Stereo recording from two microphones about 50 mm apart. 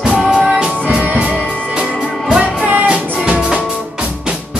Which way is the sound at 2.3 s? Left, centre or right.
Right.